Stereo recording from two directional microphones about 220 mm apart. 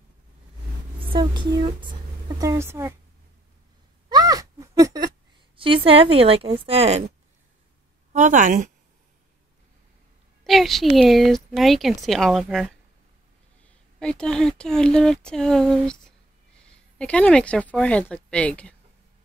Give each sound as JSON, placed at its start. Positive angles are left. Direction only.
{"t": 1.1, "sound": "speech", "side_deg": -20}
{"t": 4.1, "sound": "cat", "side_deg": -15}
{"t": 5.9, "sound": "a woman's voice", "side_deg": -25}
{"t": 8.1, "sound": "speech", "side_deg": -35}
{"t": 10.4, "sound": "speech", "side_deg": 0}